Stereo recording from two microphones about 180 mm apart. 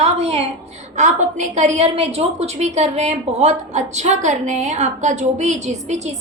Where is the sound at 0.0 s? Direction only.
35° right (ahead or behind).